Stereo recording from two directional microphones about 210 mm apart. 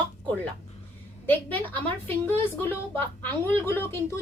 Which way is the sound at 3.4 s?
10° left (ahead or behind).